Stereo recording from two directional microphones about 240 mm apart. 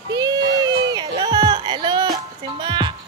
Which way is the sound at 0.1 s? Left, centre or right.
Centre.